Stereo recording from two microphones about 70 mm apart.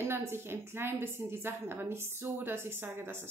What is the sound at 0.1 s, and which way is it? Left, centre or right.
A woman's voice, right.